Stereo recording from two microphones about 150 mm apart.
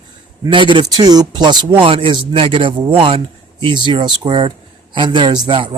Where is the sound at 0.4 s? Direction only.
30° right (ahead or behind).